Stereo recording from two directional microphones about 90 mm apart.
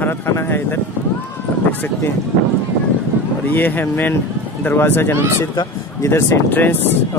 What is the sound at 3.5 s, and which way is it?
Speech, 20° left (ahead or behind).